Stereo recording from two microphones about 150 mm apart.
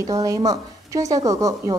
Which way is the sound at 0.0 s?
25° right (ahead or behind).